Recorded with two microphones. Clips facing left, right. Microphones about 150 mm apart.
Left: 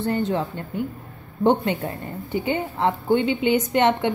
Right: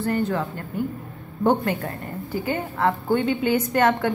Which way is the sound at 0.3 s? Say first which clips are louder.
Left 1 dB; 25° left (ahead or behind).